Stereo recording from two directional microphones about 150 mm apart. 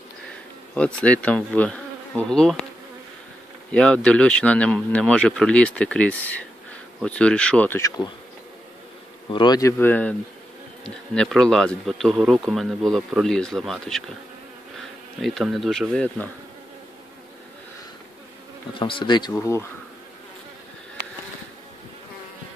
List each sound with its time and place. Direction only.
0.7 s a man's voice: 10° left (ahead or behind)
3.7 s a man's voice: 5° left (ahead or behind)
9.3 s speech: 30° left (ahead or behind); by 10.1 s 10° left (ahead or behind)
11.1 s speech: 5° left (ahead or behind)
15.2 s speech: centre (ahead or behind)
18.8 s speech: 35° left (ahead or behind)